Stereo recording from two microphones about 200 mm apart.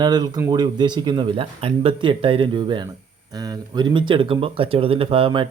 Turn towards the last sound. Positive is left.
turn(degrees=-25)  # may be behind; listen again after turning